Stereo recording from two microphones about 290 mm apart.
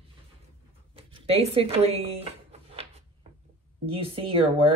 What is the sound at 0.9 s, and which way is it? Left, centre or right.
Drawer open or close, centre.